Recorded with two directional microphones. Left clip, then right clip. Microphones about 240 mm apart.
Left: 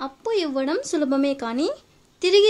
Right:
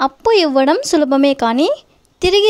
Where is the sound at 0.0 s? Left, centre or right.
Right.